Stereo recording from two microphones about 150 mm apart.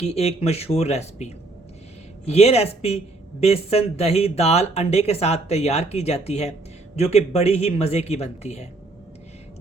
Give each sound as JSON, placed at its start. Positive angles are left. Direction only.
{"t": 0.0, "sound": "speech", "side_deg": 45}